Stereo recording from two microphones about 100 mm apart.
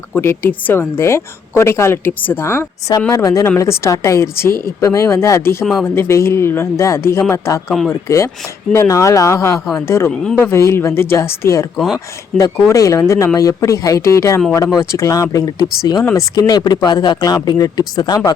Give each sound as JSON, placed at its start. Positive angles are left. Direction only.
{"t": 0.2, "sound": "a woman's voice", "side_deg": 25}